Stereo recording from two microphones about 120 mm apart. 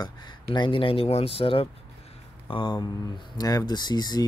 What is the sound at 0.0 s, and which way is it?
Speech, 40° left (ahead or behind).